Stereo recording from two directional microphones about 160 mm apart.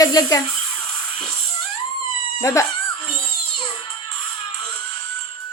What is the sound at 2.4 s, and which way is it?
Speech, 20° left (ahead or behind).